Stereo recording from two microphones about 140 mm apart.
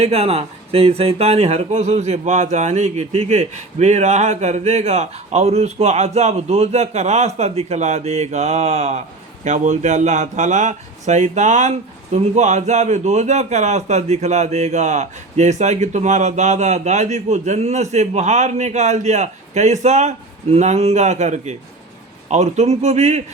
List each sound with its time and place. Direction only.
0.0 s a man's voice: 45° right (ahead or behind)